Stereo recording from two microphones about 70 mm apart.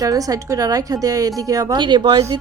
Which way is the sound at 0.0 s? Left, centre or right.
Right.